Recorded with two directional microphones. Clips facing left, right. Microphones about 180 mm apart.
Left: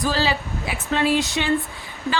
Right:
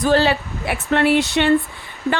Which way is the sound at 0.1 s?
60° right (ahead or behind).